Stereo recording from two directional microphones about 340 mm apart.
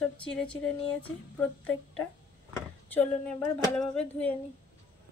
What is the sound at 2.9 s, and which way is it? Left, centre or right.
A woman's voice, centre.